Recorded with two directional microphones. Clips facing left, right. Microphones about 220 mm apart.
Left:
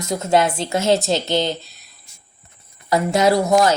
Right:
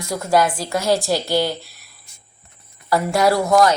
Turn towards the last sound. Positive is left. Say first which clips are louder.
# even
turn(degrees=25)  # may be behind; listen again after turning